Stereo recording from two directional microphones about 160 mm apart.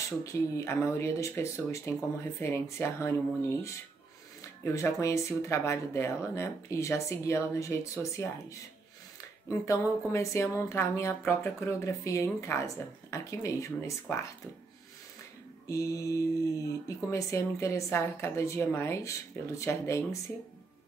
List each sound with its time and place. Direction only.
0.2 s speech: 20° left (ahead or behind)
4.7 s speech: 20° left (ahead or behind)
15.7 s speech: 20° left (ahead or behind)